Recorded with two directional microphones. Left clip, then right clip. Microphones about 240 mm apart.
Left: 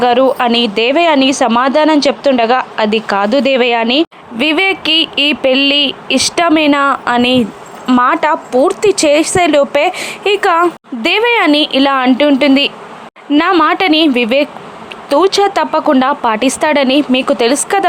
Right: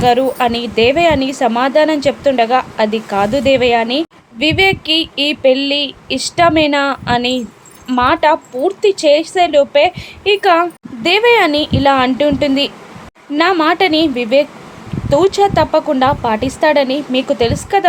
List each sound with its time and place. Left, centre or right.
0.0 s a woman's voice: centre